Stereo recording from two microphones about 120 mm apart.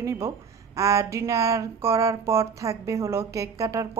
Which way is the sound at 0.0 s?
25° right (ahead or behind).